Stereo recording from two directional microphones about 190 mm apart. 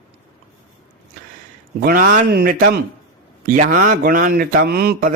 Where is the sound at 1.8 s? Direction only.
45° right (ahead or behind).